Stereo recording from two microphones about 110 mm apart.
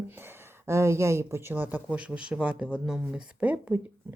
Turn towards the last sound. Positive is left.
turn(degrees=-15)  # may be behind; listen again after turning